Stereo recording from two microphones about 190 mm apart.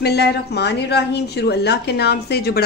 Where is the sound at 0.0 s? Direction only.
60° left (ahead or behind).